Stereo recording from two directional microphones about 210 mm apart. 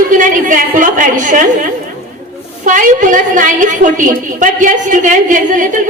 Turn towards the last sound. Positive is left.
turn(degrees=-40)  # may be behind; listen again after turning